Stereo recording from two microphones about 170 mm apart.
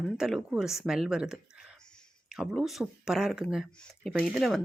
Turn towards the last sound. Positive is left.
turn(degrees=0)  # may be behind; listen again after turning